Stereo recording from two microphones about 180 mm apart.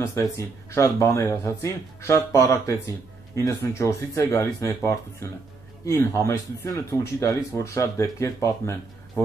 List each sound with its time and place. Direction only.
0.0 s speech: 20° left (ahead or behind)